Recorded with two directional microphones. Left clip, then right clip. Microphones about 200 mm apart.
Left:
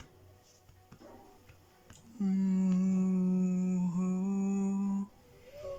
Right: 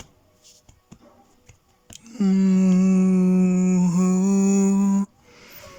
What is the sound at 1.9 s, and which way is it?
Humming, 55° right (ahead or behind).